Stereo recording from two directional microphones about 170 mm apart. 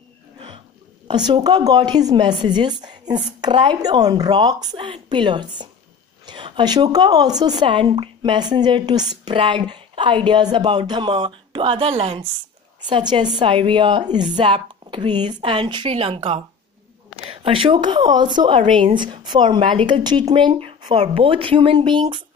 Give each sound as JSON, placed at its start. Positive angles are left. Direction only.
{"t": 1.0, "sound": "speech", "side_deg": -25}